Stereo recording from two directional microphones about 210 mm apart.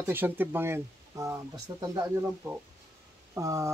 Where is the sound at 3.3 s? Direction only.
15° right (ahead or behind).